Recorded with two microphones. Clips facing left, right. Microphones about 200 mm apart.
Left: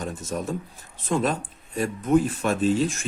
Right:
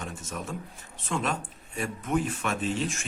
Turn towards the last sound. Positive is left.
turn(degrees=35)  # may be behind; listen again after turning